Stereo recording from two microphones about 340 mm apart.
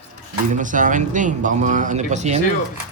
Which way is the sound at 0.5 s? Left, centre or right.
Right.